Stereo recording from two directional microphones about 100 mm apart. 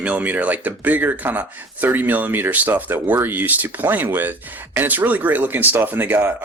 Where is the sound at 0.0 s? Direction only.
15° right (ahead or behind).